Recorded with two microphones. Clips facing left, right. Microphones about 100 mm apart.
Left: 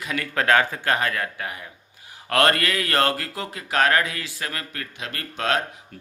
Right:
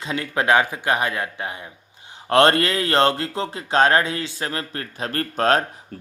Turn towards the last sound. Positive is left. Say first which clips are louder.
# right 6 dB
turn(degrees=-40)  # may be behind; listen again after turning